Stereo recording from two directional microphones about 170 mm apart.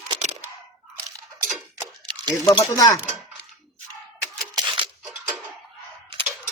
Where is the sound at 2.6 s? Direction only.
15° left (ahead or behind).